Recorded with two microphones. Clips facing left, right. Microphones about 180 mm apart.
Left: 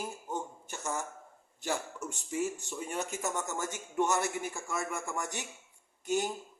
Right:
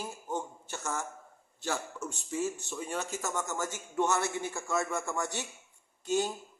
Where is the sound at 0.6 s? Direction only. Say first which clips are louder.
Even; 15° left (ahead or behind).